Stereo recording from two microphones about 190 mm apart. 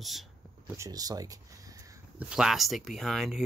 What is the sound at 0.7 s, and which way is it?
Speech, 20° right (ahead or behind).